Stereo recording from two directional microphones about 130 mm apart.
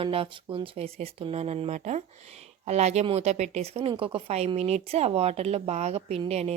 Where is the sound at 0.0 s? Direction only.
45° right (ahead or behind).